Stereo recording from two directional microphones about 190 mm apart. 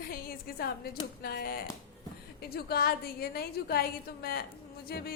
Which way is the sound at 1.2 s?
50° left (ahead or behind).